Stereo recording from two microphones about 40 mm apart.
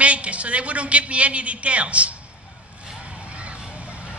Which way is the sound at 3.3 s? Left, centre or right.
Right.